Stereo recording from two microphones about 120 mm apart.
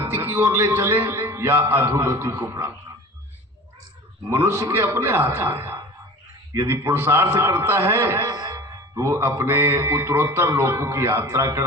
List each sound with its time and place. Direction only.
0.0 s a man's voice: 20° right (ahead or behind)
4.3 s a man's voice: 20° right (ahead or behind)